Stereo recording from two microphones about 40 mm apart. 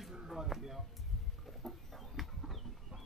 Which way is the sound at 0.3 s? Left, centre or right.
Centre.